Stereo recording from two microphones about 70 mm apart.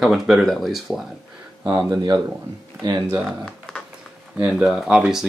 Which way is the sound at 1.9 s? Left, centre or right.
Right.